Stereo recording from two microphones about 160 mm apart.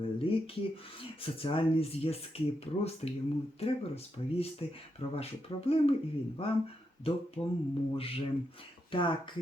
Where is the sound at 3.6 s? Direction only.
40° left (ahead or behind).